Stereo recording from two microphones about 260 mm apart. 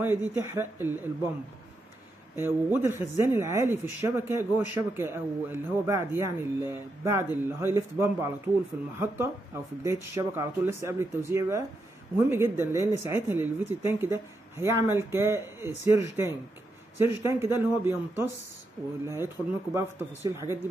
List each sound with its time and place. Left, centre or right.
0.0 s speech: centre
2.3 s speech: centre
10.1 s speech: centre